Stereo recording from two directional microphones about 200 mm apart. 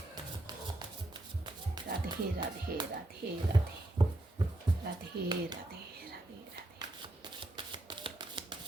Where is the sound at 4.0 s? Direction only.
20° right (ahead or behind).